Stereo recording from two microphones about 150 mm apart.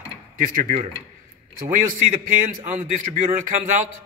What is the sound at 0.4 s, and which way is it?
A man's voice, 65° right (ahead or behind).